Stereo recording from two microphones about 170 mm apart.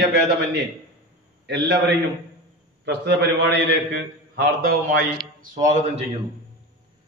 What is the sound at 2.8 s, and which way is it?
Speech, 80° right.